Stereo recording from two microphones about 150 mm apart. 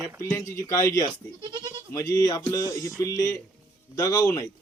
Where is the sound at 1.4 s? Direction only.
30° right (ahead or behind).